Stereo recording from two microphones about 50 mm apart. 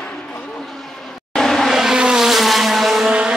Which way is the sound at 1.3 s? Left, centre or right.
Centre.